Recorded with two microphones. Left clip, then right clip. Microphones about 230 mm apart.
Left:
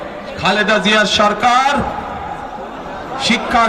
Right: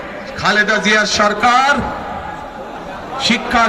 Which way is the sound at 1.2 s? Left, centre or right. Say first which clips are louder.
Even; left.